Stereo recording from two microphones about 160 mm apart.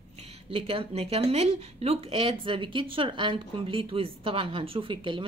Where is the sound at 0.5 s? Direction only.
35° right (ahead or behind).